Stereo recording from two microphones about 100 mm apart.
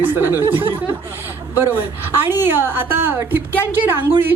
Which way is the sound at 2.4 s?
20° right (ahead or behind).